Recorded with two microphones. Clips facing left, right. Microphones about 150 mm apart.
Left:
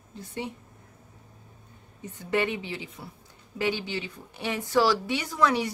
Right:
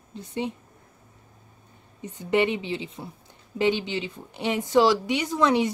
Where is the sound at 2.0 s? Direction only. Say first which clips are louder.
Right 4 dB; 20° right (ahead or behind).